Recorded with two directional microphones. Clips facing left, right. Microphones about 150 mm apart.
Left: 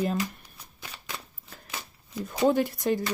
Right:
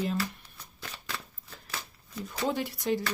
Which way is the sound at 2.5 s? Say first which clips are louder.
Left 4 dB; 50° left (ahead or behind).